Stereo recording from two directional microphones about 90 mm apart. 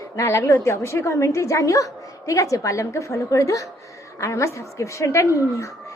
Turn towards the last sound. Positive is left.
turn(degrees=35)  # may be behind; listen again after turning